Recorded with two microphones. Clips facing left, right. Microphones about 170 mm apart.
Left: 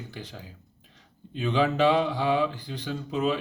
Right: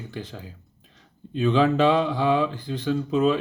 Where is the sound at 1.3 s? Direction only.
50° right (ahead or behind).